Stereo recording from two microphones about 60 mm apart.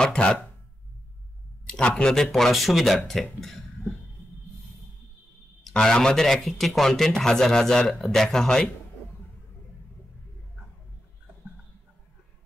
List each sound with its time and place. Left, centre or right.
0.0 s speech: centre
1.7 s speech: centre
2.3 s speech: centre
5.6 s speech: centre